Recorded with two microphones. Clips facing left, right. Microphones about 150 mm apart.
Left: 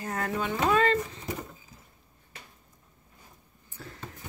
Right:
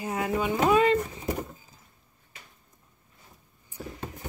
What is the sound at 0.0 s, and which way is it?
Speech, 10° right (ahead or behind).